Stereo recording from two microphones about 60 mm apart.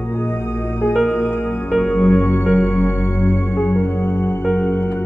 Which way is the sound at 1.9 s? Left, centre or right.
Left.